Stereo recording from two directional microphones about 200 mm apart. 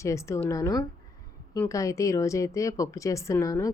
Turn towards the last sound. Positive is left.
turn(degrees=15)  # may be behind; listen again after turning